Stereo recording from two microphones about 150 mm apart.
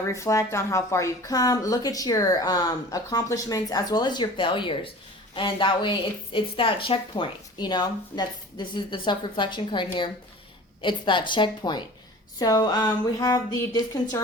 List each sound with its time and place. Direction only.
0.1 s a woman's voice: 20° left (ahead or behind)